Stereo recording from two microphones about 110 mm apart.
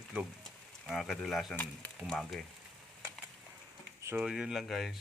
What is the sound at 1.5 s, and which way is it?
Speech, 15° left (ahead or behind).